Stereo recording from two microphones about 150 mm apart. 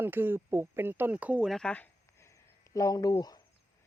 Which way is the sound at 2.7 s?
25° left (ahead or behind).